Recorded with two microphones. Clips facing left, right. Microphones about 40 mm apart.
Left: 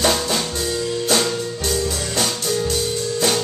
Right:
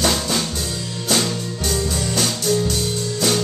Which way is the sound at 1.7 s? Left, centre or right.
Centre.